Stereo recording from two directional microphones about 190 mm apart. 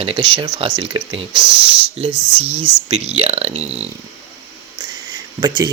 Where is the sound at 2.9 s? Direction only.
35° right (ahead or behind).